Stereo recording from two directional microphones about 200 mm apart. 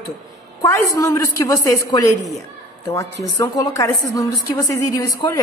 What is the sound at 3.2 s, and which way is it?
A woman's voice, 15° left (ahead or behind).